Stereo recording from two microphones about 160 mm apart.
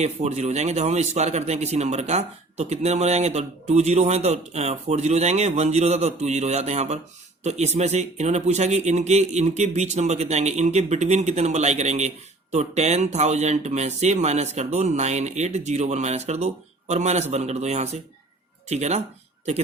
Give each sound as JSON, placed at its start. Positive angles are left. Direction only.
{"t": 0.0, "sound": "a man's voice", "side_deg": -45}